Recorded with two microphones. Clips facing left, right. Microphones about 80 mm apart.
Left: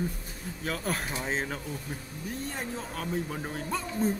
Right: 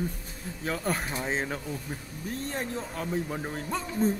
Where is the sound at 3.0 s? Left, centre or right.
Centre.